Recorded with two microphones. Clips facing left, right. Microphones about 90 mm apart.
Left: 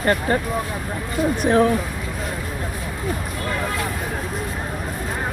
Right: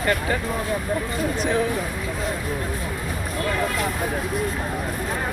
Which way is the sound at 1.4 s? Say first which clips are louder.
Left 7 dB; 50° left (ahead or behind).